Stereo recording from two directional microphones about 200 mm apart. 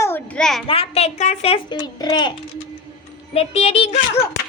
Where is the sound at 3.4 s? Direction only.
30° left (ahead or behind).